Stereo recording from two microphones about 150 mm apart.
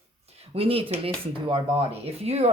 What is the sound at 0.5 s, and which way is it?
Speech, 40° right (ahead or behind).